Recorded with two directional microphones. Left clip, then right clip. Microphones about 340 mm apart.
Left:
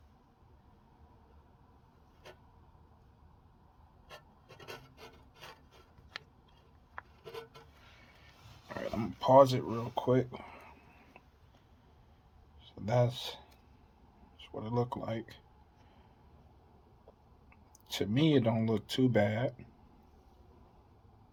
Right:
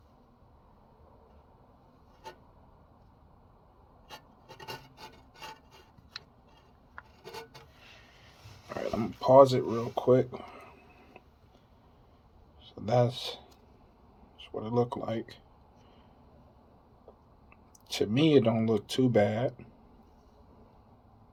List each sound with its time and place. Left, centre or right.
8.7 s speech: left
12.7 s speech: left
17.8 s speech: left